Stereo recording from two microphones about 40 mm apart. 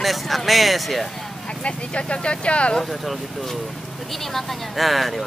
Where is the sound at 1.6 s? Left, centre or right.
Left.